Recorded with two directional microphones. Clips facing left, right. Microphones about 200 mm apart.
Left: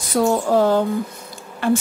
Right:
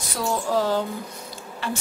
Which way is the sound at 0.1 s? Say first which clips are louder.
Left 7 dB; 45° left (ahead or behind).